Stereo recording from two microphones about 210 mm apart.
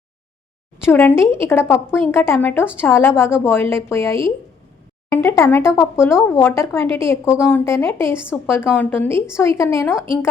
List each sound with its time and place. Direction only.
0.9 s speech: 10° left (ahead or behind)